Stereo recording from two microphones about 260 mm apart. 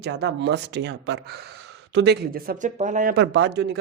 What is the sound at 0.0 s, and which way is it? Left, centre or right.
Speech, right.